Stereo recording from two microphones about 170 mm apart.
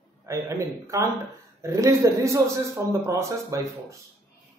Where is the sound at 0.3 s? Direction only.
15° right (ahead or behind).